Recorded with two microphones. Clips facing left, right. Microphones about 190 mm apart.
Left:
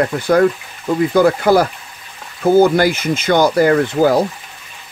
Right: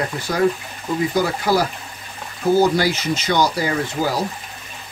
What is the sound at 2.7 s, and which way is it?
Speech, 55° left (ahead or behind).